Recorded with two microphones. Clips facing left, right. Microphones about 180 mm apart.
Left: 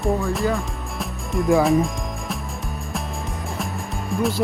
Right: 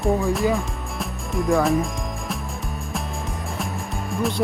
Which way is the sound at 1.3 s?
Centre (ahead or behind).